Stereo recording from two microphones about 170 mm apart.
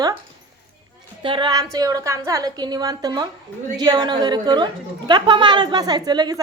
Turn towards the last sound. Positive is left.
turn(degrees=-25)  # may be behind; listen again after turning